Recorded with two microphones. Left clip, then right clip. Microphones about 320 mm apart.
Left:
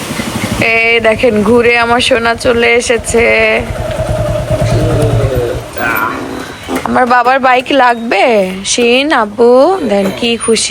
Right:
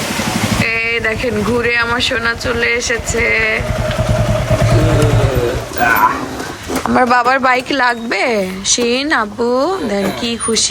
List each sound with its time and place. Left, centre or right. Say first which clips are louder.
0.6 s speech: left 9 dB; centre
6.8 s speech: left 3 dB; centre